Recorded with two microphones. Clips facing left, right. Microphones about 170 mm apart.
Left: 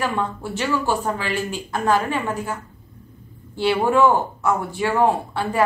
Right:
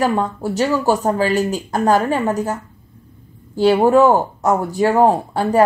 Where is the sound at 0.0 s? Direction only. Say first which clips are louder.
Right 6 dB; 40° right (ahead or behind).